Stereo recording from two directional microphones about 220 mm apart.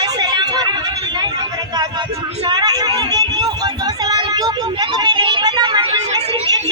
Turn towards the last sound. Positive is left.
turn(degrees=-20)  # may be behind; listen again after turning